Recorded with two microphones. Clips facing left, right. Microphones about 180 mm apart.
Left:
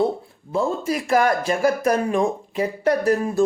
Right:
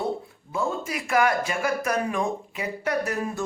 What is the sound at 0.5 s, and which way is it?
Speech, 35° left (ahead or behind).